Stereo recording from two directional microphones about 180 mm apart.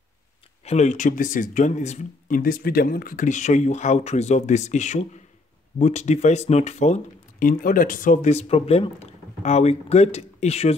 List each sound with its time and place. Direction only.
0.7 s speech: 40° left (ahead or behind)